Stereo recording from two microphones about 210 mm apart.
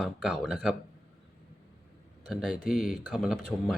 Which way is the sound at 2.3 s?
Centre (ahead or behind).